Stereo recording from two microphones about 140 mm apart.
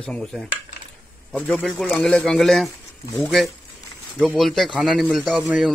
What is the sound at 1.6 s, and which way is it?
Speech, centre (ahead or behind).